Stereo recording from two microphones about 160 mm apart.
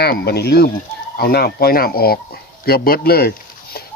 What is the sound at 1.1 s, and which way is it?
Speech, 75° left (ahead or behind).